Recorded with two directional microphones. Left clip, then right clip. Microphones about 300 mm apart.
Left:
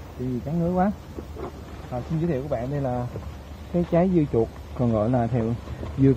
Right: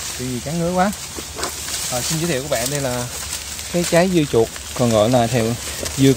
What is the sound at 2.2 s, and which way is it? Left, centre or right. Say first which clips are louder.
Speech: right 3 dB; right.